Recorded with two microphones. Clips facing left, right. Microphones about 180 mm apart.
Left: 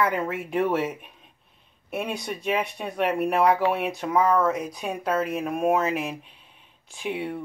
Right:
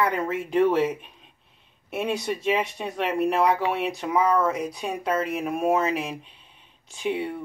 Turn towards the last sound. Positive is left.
turn(degrees=0)  # may be behind; listen again after turning